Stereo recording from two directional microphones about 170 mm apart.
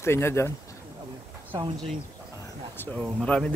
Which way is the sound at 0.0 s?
15° left (ahead or behind).